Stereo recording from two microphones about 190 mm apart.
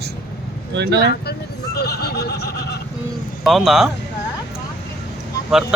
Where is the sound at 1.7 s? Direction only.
60° left (ahead or behind).